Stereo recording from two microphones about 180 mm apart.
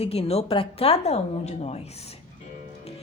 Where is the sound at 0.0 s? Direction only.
35° left (ahead or behind).